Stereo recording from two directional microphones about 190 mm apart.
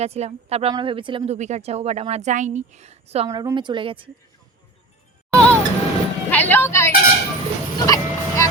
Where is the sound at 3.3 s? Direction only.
20° right (ahead or behind).